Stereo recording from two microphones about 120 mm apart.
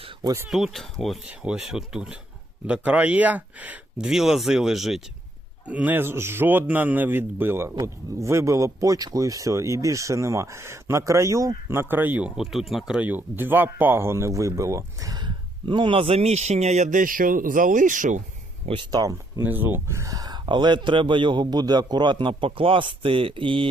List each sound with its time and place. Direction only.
0.2 s speech: 30° right (ahead or behind)
0.4 s a man's voice: centre (ahead or behind)
12.4 s speech: centre (ahead or behind); by 18.2 s 90° right
18.6 s speech: 50° right (ahead or behind)
18.9 s speech: 30° right (ahead or behind)
19.4 s speech: 15° right (ahead or behind); by 23.6 s 45° right (ahead or behind)